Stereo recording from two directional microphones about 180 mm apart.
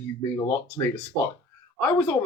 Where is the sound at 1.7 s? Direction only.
10° left (ahead or behind).